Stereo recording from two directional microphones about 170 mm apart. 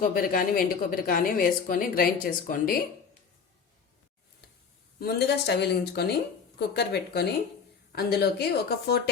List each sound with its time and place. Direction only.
0.0 s speech: 55° left (ahead or behind)
4.9 s speech: 70° left (ahead or behind)